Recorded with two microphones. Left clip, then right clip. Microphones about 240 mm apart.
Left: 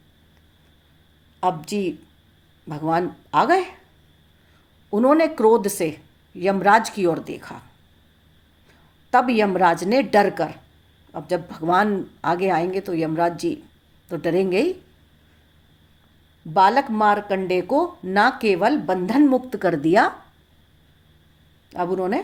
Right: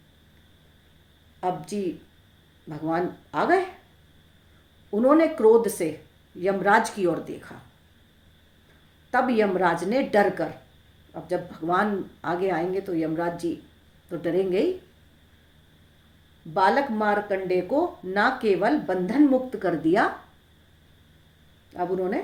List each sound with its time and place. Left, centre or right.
1.4 s speech: left
4.9 s speech: left
9.0 s speech: left
16.6 s speech: left
21.7 s speech: left